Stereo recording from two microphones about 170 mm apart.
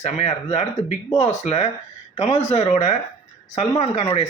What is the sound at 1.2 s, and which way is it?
Speech, 40° left (ahead or behind).